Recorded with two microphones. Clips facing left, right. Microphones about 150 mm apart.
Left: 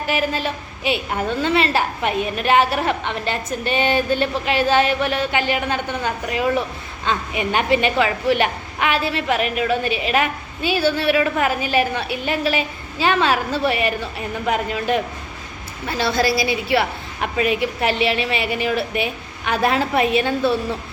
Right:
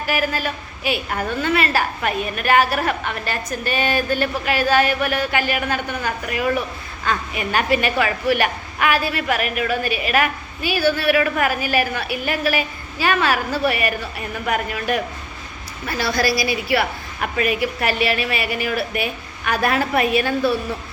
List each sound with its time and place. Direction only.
0.1 s a woman's voice: 25° left (ahead or behind)